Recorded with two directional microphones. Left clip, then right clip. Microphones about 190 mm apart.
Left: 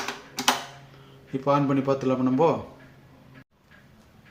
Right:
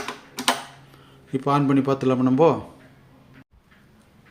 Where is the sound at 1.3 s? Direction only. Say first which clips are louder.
Right 2 dB; 45° right (ahead or behind).